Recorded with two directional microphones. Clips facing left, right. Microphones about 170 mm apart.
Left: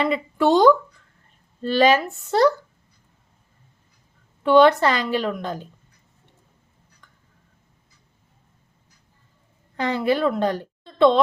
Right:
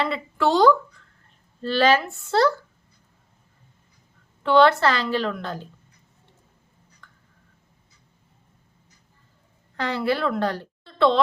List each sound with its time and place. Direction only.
0.0 s a woman's voice: 15° left (ahead or behind)
4.4 s a woman's voice: 15° left (ahead or behind)
7.0 s a sound: 15° left (ahead or behind)
9.7 s a woman's voice: 15° left (ahead or behind)